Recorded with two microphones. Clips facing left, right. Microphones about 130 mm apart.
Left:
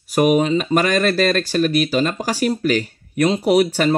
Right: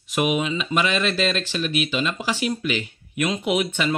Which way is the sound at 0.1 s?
40° left (ahead or behind).